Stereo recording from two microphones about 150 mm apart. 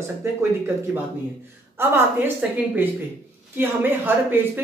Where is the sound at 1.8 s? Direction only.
15° right (ahead or behind).